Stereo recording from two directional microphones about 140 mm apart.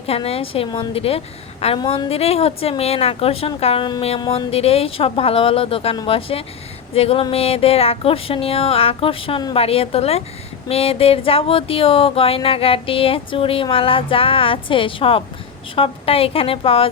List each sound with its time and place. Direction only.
0.0 s speech: 45° left (ahead or behind)
1.8 s speech: 30° left (ahead or behind)
2.0 s speech: 45° left (ahead or behind)